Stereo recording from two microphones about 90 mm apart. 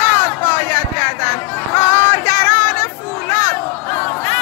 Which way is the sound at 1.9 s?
25° left (ahead or behind).